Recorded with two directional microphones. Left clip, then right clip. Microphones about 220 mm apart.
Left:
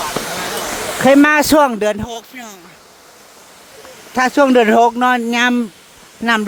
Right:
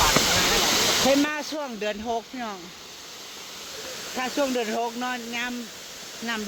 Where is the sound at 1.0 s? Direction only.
55° left (ahead or behind).